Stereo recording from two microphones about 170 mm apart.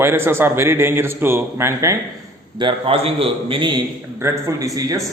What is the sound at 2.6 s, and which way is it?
A man's voice, 30° right (ahead or behind).